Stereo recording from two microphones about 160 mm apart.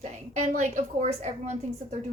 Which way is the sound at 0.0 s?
45° right (ahead or behind).